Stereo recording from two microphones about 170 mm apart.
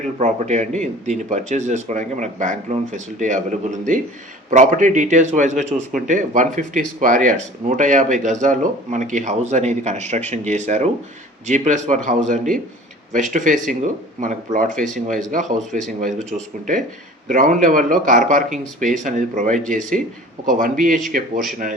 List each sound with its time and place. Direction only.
0.2 s speech: 45° right (ahead or behind)
17.2 s speech: 50° right (ahead or behind)